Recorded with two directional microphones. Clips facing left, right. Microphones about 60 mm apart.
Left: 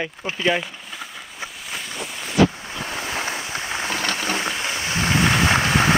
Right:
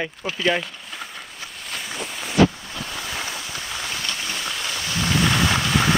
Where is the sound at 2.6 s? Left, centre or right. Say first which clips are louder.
Left 3 dB; left.